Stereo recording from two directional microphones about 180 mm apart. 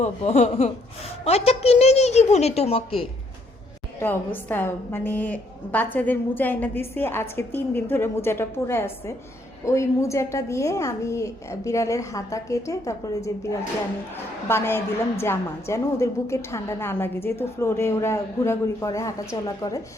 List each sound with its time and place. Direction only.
0.0 s a woman's voice: 40° left (ahead or behind)
4.0 s a woman's voice: 10° left (ahead or behind)